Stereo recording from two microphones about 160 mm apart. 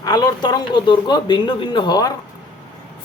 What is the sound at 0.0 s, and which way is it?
Speech, 25° left (ahead or behind).